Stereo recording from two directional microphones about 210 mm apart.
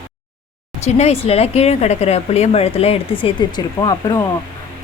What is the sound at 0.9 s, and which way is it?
Speech, 30° left (ahead or behind).